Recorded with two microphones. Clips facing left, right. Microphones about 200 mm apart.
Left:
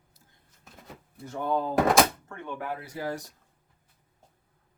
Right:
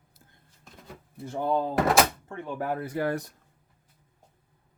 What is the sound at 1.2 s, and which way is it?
Speech, 25° right (ahead or behind).